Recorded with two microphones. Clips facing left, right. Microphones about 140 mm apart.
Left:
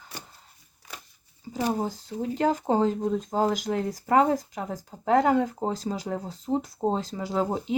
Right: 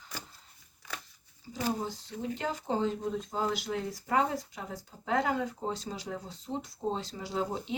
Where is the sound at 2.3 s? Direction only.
40° left (ahead or behind).